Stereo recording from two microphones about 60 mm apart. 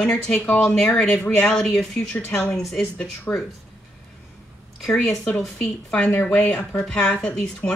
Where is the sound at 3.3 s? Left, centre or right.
Centre.